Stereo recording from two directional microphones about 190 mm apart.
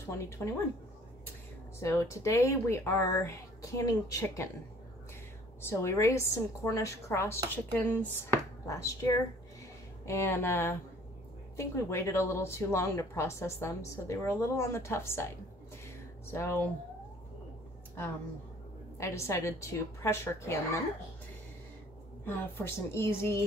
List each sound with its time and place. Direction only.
0.0 s speech: 15° left (ahead or behind)
1.8 s speech: 15° left (ahead or behind)
5.6 s speech: 15° left (ahead or behind)
18.9 s speech: 15° left (ahead or behind)
22.2 s speech: 10° left (ahead or behind)